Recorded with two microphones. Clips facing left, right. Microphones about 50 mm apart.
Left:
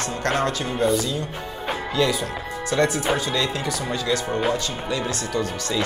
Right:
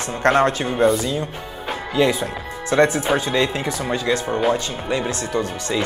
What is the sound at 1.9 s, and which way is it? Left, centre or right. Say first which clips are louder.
Speech: right 4 dB; right.